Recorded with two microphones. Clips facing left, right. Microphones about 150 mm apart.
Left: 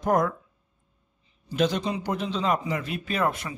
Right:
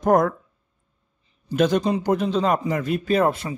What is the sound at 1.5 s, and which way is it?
A man's voice, 50° right (ahead or behind).